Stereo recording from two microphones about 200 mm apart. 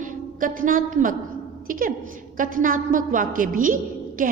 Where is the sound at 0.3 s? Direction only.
40° right (ahead or behind).